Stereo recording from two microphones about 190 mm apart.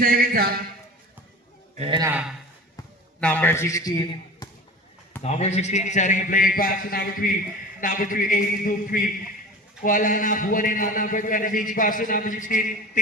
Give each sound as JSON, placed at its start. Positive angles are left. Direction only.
{"t": 0.0, "sound": "speech", "side_deg": -50}
{"t": 1.8, "sound": "a man's voice", "side_deg": -25}
{"t": 2.0, "sound": "a man's voice", "side_deg": -10}
{"t": 3.2, "sound": "a man's voice", "side_deg": 5}
{"t": 5.2, "sound": "a man's voice", "side_deg": 35}